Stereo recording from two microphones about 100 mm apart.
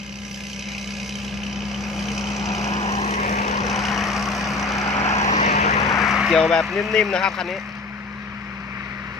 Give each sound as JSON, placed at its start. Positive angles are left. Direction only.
{"t": 1.5, "sound": "vehicle", "side_deg": 0}
{"t": 2.6, "sound": "vehicle", "side_deg": 90}
{"t": 3.7, "sound": "vehicle", "side_deg": 0}
{"t": 4.9, "sound": "vehicle", "side_deg": 90}
{"t": 6.1, "sound": "speech", "side_deg": -5}